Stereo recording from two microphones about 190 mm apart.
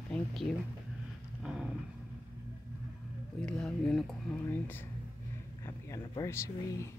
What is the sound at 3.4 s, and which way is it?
Speech, 5° left (ahead or behind).